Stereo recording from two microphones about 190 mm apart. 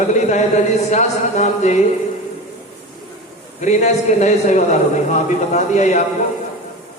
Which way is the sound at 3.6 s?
40° left (ahead or behind).